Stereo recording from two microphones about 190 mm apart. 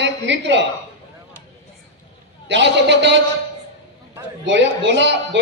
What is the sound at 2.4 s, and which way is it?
Speech, 65° right (ahead or behind).